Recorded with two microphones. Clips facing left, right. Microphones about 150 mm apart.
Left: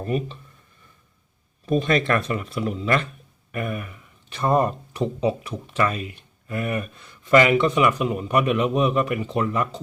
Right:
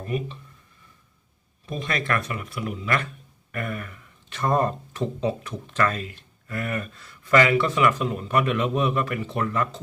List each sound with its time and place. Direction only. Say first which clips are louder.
0.0 s speech: left 3 dB; 35° left (ahead or behind)
1.8 s speech: left 2 dB; 30° left (ahead or behind)
3.5 s speech: left 3 dB; 15° left (ahead or behind)